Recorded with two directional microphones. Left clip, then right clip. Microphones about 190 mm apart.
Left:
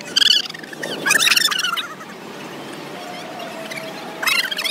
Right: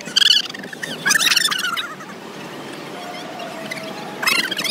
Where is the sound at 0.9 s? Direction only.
5° left (ahead or behind).